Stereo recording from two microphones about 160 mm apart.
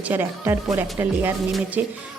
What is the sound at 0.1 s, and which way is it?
Speech, 15° right (ahead or behind).